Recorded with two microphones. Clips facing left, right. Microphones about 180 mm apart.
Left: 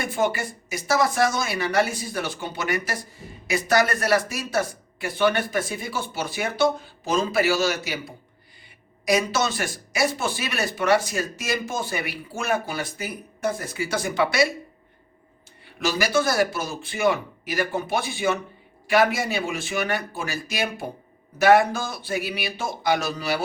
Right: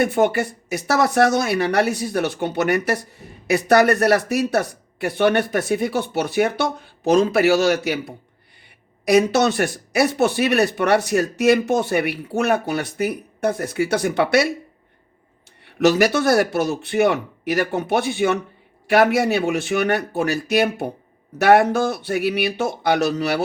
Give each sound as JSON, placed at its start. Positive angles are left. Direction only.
{"t": 0.0, "sound": "speech", "side_deg": -60}
{"t": 15.6, "sound": "speech", "side_deg": -70}